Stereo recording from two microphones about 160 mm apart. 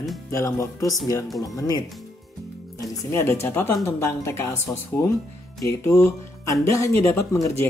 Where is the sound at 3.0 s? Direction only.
15° left (ahead or behind).